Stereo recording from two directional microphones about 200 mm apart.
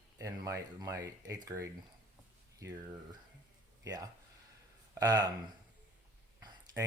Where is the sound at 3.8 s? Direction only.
15° right (ahead or behind).